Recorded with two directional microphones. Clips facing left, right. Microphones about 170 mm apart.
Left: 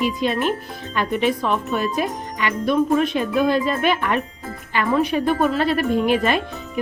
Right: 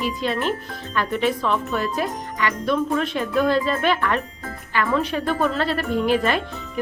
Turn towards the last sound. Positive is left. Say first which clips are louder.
# left 2 dB
turn(degrees=15)  # may be behind; listen again after turning